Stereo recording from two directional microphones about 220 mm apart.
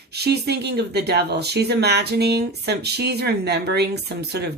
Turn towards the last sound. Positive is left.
turn(degrees=-50)  # may be behind; listen again after turning